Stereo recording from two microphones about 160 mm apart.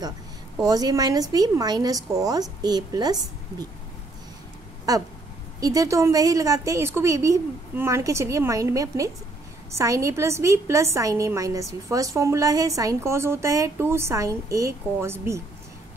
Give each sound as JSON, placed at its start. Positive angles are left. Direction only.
{"t": 0.7, "sound": "a woman's voice", "side_deg": -25}
{"t": 4.9, "sound": "a woman's voice", "side_deg": -20}